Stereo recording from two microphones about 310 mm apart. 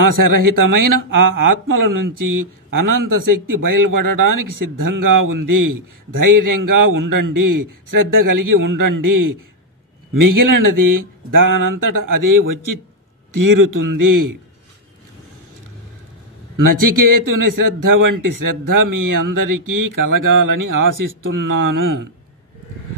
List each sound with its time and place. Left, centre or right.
0.0 s speech: right
16.5 s speech: right